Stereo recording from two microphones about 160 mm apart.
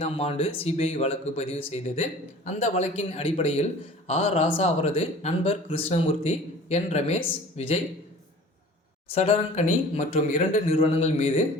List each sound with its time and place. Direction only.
0.0 s a man's voice: 40° left (ahead or behind)
9.1 s speech: 40° left (ahead or behind)